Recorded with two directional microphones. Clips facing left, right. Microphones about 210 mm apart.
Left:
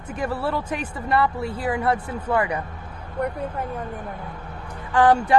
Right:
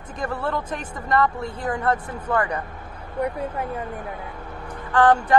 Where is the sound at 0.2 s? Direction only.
5° left (ahead or behind).